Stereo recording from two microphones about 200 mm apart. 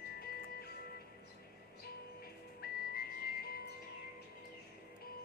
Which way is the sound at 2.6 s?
50° left (ahead or behind).